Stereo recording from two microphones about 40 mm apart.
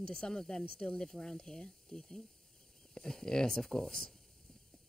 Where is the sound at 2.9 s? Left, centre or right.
Centre.